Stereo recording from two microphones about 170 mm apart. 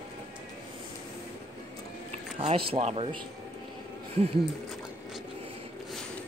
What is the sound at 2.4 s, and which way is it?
Speech, 35° right (ahead or behind).